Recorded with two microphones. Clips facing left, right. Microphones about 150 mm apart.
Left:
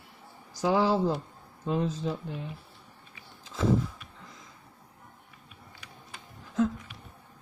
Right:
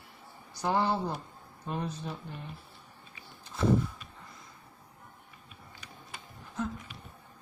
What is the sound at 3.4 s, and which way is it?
Vehicle, 90° left.